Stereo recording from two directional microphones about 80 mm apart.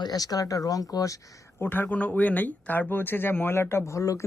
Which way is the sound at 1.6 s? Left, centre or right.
Left.